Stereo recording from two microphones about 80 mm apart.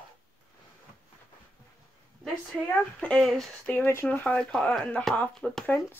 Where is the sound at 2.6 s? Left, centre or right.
Centre.